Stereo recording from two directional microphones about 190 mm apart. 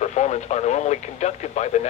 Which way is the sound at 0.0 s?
35° left (ahead or behind).